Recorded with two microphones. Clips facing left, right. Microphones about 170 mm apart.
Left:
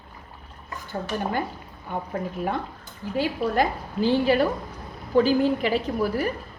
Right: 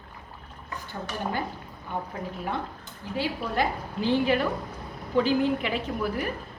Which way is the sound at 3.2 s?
40° left (ahead or behind).